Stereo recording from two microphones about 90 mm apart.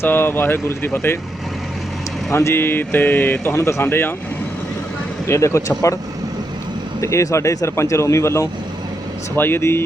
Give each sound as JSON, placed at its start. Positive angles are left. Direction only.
{"t": 0.0, "sound": "speech", "side_deg": 25}
{"t": 2.3, "sound": "speech", "side_deg": 30}
{"t": 5.2, "sound": "speech", "side_deg": 35}
{"t": 7.0, "sound": "speech", "side_deg": 35}